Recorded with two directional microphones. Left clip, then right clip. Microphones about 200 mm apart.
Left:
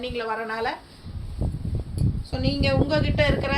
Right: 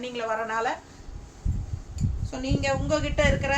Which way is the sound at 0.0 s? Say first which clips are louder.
Left 1 dB; 15° right (ahead or behind).